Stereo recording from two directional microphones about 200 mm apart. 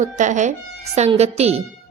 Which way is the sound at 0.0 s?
40° right (ahead or behind).